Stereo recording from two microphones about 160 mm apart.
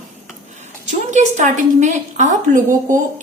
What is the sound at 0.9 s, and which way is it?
A woman's voice, 50° right (ahead or behind).